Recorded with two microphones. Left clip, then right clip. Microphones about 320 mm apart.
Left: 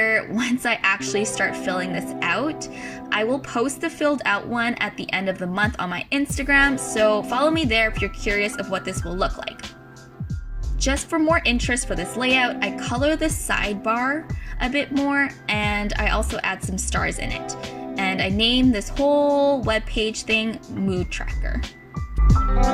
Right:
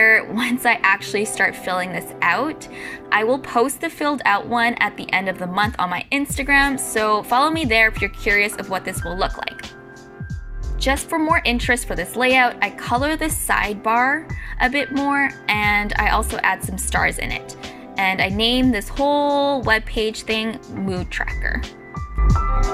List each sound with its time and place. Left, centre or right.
0.1 s a woman's voice: centre
11.1 s a woman's voice: centre
22.3 s music: centre